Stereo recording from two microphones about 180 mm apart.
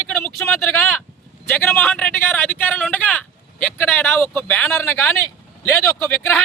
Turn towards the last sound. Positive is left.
turn(degrees=15)  # may be behind; listen again after turning